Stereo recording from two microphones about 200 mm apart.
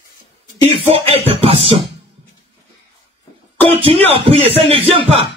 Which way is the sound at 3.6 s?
30° right (ahead or behind).